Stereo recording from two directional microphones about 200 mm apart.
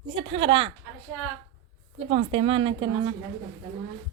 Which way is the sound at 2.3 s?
25° right (ahead or behind).